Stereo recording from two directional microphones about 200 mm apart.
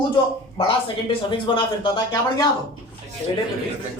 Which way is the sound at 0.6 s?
25° left (ahead or behind).